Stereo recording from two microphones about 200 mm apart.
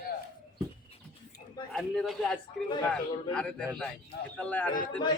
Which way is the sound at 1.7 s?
5° left (ahead or behind).